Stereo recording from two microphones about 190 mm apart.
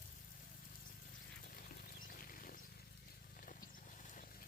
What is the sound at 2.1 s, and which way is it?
Wild animals, 50° left (ahead or behind).